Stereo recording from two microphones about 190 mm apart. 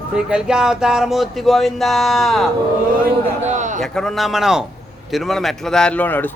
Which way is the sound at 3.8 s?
Centre (ahead or behind).